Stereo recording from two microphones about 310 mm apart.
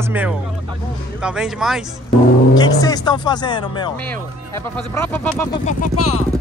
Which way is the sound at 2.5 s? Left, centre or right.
Centre.